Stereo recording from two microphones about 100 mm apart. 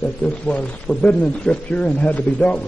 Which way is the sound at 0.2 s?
15° left (ahead or behind).